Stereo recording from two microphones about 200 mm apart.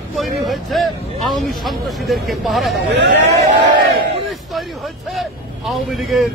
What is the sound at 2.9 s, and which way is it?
Speech, 60° right (ahead or behind).